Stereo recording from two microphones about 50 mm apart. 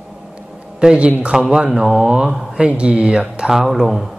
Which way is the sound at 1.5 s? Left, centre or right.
Centre.